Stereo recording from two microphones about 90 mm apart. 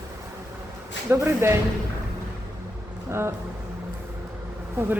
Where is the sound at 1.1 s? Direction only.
25° right (ahead or behind).